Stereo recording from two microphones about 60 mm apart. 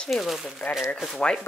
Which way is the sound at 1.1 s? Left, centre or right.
Centre.